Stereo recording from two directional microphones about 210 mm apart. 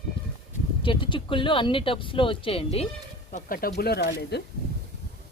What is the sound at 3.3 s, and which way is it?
Speech, 40° left (ahead or behind).